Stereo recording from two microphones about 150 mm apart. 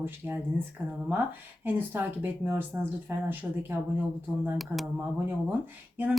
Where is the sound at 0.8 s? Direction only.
10° right (ahead or behind).